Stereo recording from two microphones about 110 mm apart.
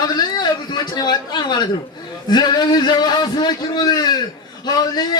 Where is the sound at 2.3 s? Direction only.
40° left (ahead or behind).